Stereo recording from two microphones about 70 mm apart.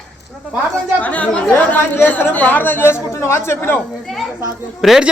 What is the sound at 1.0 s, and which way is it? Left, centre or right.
Speech, left.